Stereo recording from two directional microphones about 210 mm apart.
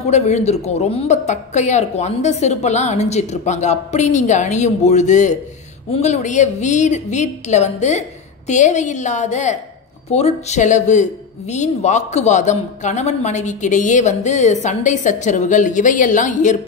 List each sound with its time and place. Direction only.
0.0 s speech: 30° left (ahead or behind)